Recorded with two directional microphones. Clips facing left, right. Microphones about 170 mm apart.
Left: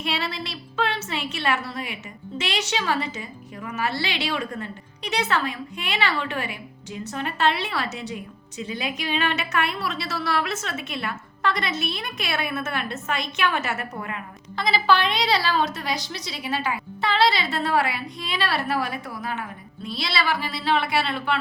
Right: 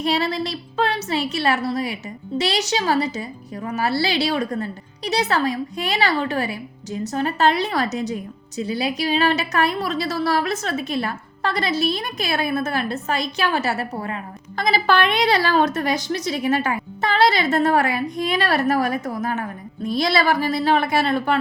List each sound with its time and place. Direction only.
0.0 s a woman's voice: 40° right (ahead or behind)
14.5 s a woman's voice: 45° right (ahead or behind)